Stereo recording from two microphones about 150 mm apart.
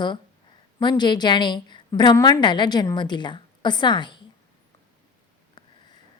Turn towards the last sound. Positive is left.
turn(degrees=30)  # may be behind; listen again after turning